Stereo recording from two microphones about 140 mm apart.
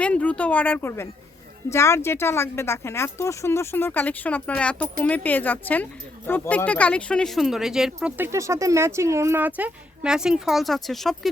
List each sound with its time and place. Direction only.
0.0 s speech: 10° left (ahead or behind)
8.2 s speech: 20° right (ahead or behind); by 11.3 s centre (ahead or behind)